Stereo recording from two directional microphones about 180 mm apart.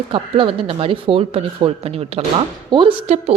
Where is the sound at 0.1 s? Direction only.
30° right (ahead or behind).